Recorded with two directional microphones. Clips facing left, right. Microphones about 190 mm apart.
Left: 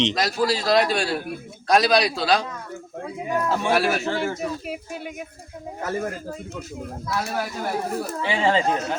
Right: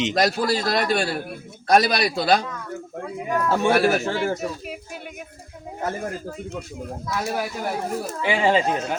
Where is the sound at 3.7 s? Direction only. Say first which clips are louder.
Right 2 dB; 50° right (ahead or behind).